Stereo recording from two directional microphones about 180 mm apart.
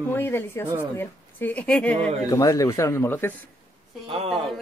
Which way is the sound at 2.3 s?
20° left (ahead or behind).